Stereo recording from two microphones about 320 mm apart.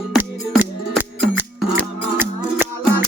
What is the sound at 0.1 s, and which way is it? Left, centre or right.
Music, centre.